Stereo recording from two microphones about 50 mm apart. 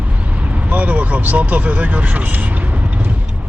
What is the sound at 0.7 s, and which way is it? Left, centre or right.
Vehicle, right.